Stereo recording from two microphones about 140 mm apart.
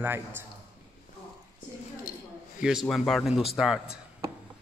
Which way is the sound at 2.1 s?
80° left.